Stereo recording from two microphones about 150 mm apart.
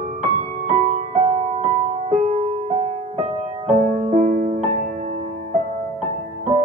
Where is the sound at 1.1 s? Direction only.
45° right (ahead or behind).